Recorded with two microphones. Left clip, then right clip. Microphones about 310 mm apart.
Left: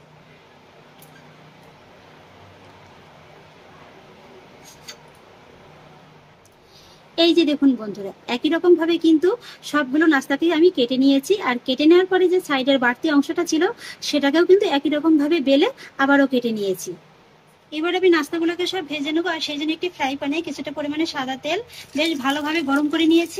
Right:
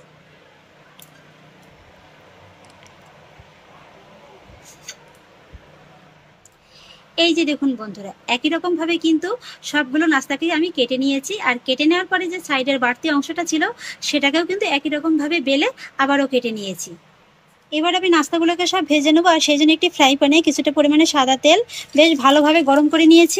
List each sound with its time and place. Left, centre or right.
7.2 s speech: centre